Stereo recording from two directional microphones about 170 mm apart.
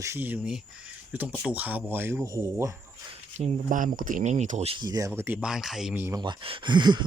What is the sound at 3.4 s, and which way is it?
Speech, 50° right (ahead or behind).